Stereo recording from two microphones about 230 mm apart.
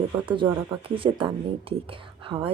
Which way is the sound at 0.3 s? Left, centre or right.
Right.